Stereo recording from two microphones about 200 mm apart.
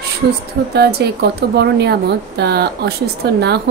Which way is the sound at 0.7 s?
55° right (ahead or behind).